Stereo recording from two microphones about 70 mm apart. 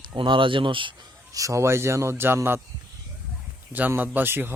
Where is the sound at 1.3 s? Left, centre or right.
Right.